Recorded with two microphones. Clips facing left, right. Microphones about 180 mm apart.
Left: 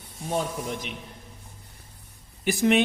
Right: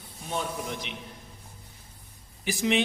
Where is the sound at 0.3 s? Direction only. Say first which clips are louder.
Left 4 dB; 45° left (ahead or behind).